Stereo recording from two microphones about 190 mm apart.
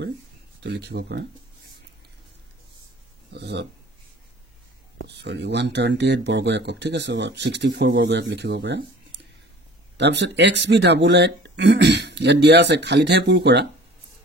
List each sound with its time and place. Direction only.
0.7 s speech: 60° right (ahead or behind)
3.3 s speech: 60° right (ahead or behind)
5.0 s speech: 65° right (ahead or behind)